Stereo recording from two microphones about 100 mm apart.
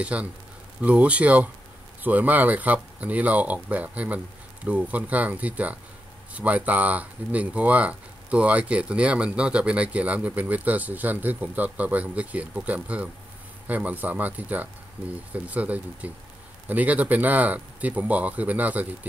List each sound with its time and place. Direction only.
0.0 s speech: 15° right (ahead or behind)